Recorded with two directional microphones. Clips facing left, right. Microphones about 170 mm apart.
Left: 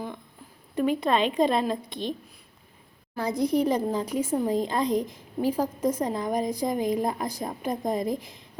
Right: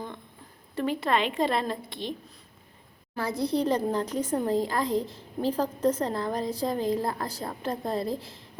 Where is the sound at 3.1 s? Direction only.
15° left (ahead or behind).